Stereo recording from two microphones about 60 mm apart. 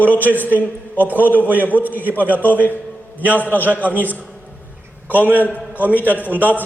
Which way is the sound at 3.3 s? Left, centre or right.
Left.